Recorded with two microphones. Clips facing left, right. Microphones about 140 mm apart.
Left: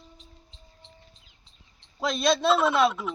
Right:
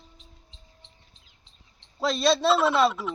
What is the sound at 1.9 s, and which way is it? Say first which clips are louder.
A man's voice: right 1 dB; centre (ahead or behind).